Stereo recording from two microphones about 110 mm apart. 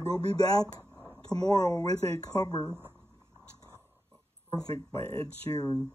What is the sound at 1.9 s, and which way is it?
Speech, 65° right (ahead or behind).